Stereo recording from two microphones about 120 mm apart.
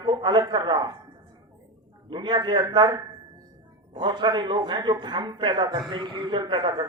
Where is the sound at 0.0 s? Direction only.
40° right (ahead or behind).